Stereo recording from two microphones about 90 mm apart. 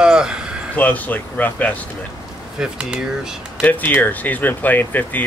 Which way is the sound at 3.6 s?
20° left (ahead or behind).